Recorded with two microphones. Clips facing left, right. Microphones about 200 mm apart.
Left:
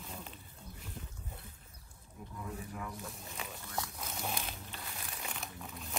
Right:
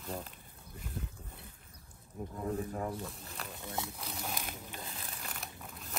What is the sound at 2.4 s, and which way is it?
Speech, 40° right (ahead or behind).